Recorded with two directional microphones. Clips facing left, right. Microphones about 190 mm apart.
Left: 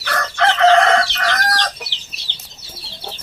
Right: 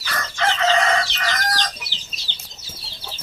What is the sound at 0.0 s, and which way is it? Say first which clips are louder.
Chicken: left 6 dB; 60° left (ahead or behind).